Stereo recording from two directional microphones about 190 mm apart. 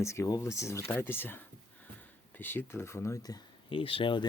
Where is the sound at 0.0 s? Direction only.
15° left (ahead or behind).